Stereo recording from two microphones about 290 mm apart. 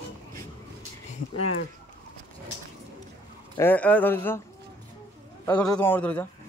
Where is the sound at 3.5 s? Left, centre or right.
Centre.